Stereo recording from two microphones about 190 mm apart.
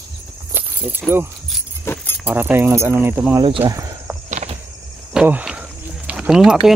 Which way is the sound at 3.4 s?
25° right (ahead or behind).